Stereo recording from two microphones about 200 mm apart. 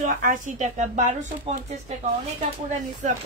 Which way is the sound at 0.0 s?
40° right (ahead or behind).